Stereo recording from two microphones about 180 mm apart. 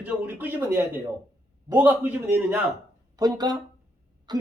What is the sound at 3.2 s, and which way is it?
Speech, 20° right (ahead or behind).